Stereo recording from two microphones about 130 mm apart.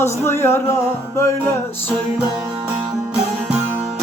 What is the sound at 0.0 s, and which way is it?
Music, 20° left (ahead or behind).